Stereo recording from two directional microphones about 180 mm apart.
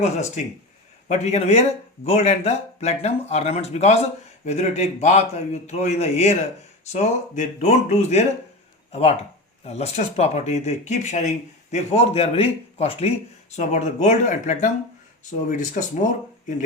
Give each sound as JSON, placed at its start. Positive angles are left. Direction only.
{"t": 0.0, "sound": "speech", "side_deg": 40}